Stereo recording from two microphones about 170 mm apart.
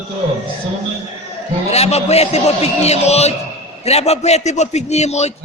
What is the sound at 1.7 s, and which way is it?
A man's voice, 40° left (ahead or behind).